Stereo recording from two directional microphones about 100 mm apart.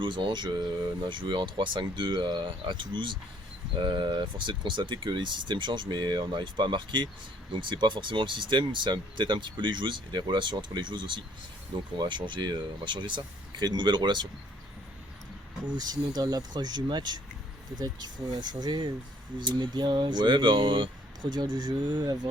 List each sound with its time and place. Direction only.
0.0 s speech: 55° right (ahead or behind)
15.6 s speech: 45° right (ahead or behind)